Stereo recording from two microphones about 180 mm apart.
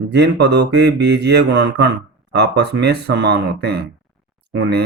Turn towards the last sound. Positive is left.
turn(degrees=-65)  # may be behind; listen again after turning